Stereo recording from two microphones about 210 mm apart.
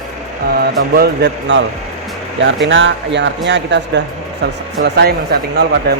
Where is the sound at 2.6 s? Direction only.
60° right (ahead or behind).